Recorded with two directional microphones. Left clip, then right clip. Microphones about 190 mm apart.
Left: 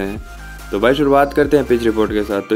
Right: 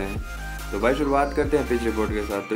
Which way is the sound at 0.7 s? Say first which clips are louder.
Left 9 dB; 40° left (ahead or behind).